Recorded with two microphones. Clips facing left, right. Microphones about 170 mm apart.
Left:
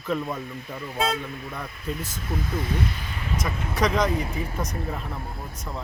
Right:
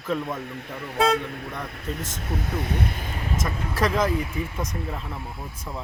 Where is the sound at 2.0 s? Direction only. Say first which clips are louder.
Even; 80° right; by 3.4 s 45° right (ahead or behind).